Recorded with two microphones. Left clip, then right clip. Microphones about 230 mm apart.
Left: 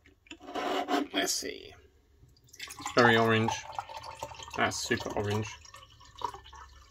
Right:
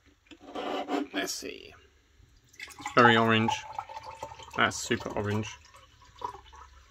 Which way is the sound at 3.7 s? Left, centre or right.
Centre.